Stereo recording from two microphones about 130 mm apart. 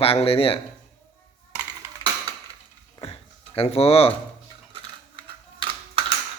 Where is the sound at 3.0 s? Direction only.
50° left (ahead or behind).